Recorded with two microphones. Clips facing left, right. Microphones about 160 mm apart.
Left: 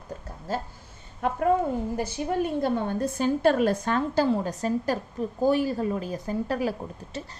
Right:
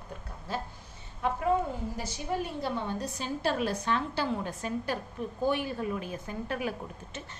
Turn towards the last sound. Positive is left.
turn(degrees=35)  # may be behind; listen again after turning